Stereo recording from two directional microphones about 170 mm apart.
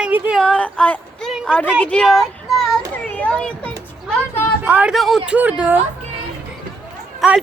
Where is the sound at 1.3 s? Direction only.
5° right (ahead or behind).